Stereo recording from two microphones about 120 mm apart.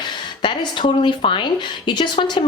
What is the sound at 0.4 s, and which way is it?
A woman's voice, 40° left (ahead or behind).